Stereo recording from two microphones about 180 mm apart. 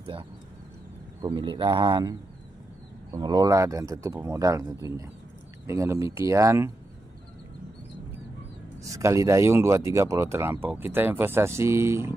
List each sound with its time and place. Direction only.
1.2 s speech: 25° right (ahead or behind)
8.8 s speech: 15° right (ahead or behind)